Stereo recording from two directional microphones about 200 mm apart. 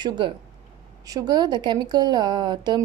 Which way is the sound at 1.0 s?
20° right (ahead or behind).